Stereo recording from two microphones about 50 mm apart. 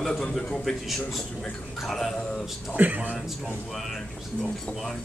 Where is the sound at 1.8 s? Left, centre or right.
Centre.